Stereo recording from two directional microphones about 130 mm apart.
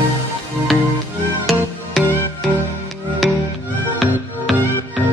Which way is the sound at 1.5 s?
Centre (ahead or behind).